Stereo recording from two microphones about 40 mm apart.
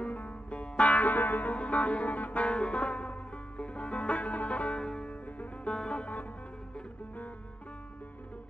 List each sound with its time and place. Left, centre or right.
0.1 s music: left
4.7 s music: left